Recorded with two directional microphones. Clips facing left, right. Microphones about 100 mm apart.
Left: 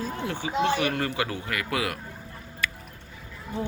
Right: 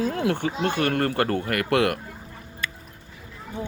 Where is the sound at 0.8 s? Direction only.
55° right (ahead or behind).